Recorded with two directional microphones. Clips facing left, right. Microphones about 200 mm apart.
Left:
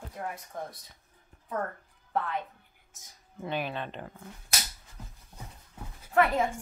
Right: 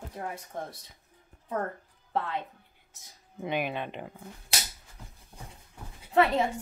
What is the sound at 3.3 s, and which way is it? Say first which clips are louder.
Speech: right 2 dB; 15° right (ahead or behind).